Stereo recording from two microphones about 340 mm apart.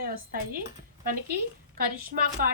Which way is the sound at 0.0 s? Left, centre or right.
Right.